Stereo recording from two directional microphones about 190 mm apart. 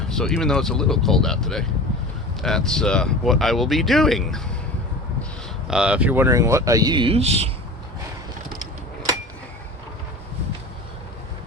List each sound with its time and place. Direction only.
0.1 s speech: centre (ahead or behind)
5.6 s speech: 5° right (ahead or behind); by 7.5 s 35° right (ahead or behind)